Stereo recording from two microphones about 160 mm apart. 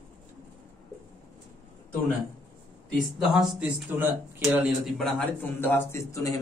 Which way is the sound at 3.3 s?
5° right (ahead or behind).